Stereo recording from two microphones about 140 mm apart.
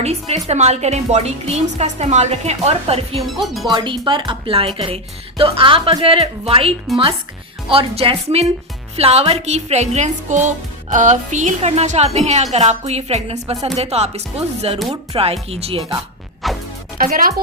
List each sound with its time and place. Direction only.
0.0 s speech: 50° right (ahead or behind)
3.2 s speech: centre (ahead or behind)
3.7 s a woman's voice: 35° right (ahead or behind)
16.4 s music: centre (ahead or behind)
17.0 s speech: 90° right